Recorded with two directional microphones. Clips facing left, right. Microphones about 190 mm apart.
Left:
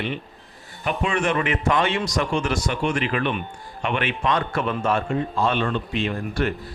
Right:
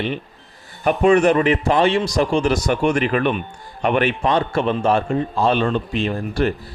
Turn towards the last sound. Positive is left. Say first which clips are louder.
# right 4 dB
turn(degrees=-35)  # may be behind; listen again after turning